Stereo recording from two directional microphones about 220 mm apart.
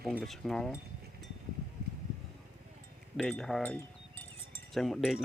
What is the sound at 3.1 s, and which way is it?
Speech, centre (ahead or behind).